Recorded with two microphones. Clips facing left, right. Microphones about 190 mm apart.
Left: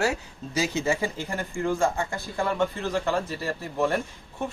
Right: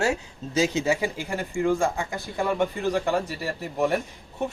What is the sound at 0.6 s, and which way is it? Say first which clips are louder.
Speech: right 3 dB; 15° right (ahead or behind).